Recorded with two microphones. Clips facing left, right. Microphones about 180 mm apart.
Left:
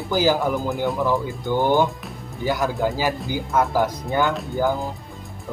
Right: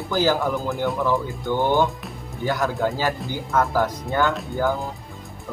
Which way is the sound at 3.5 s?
15° left (ahead or behind).